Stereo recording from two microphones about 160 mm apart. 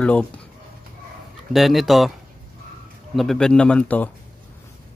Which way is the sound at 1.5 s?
Centre (ahead or behind).